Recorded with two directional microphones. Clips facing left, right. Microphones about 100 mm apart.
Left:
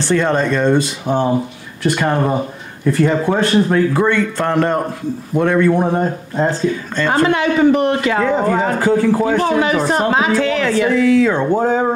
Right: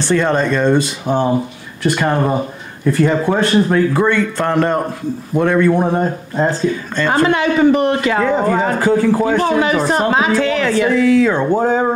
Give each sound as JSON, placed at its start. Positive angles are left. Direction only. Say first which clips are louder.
{"t": 0.0, "sound": "speech", "louder": "right 1 dB", "side_deg": -25}